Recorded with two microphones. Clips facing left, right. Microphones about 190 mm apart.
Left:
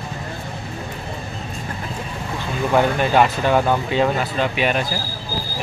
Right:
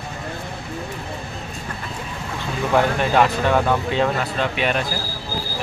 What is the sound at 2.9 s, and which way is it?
Speech, 5° left (ahead or behind).